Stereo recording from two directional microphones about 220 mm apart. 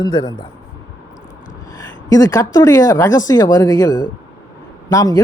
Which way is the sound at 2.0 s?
15° left (ahead or behind).